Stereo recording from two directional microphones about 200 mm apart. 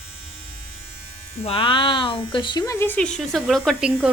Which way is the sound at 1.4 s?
25° left (ahead or behind).